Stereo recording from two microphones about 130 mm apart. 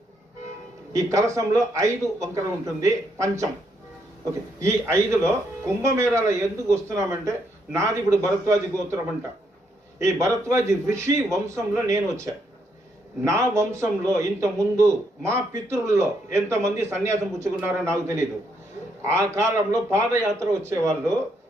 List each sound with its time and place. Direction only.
0.9 s a man's voice: 25° right (ahead or behind)
4.6 s a man's voice: 20° right (ahead or behind)
10.0 s a man's voice: 25° right (ahead or behind)
19.0 s a man's voice: 20° right (ahead or behind)